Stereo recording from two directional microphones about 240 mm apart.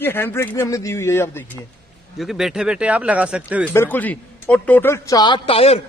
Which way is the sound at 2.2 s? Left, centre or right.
Centre.